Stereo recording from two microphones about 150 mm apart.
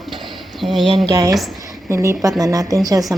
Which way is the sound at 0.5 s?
Centre (ahead or behind).